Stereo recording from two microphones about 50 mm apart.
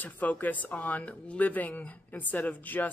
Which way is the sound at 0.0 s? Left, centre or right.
Left.